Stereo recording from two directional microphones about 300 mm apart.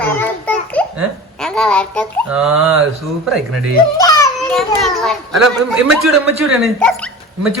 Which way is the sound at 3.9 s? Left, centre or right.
Centre.